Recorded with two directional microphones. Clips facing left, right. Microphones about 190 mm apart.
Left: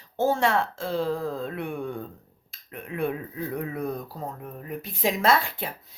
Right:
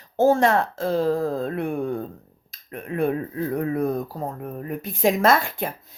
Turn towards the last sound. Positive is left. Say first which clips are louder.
# right 3 dB
turn(degrees=-45)  # may be behind; listen again after turning